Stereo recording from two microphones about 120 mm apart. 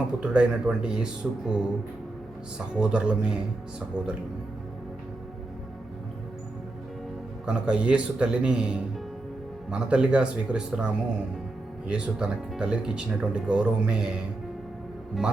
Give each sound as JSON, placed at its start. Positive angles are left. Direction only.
{"t": 0.2, "sound": "speech", "side_deg": -5}
{"t": 2.7, "sound": "speech", "side_deg": -10}
{"t": 7.4, "sound": "speech", "side_deg": -10}